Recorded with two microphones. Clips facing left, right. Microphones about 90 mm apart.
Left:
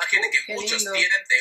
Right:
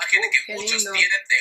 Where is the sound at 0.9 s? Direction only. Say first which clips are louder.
Even; 30° left (ahead or behind).